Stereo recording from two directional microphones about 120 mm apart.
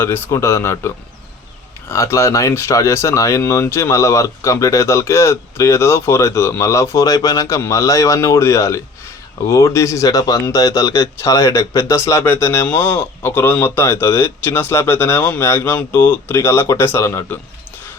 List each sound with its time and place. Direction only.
0.0 s speech: 20° left (ahead or behind)